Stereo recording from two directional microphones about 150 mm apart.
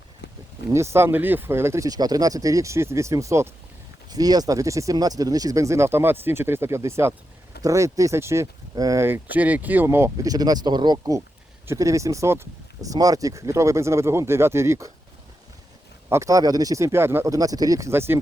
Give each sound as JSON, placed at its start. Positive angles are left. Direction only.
{"t": 0.7, "sound": "speech", "side_deg": -20}
{"t": 16.0, "sound": "speech", "side_deg": -20}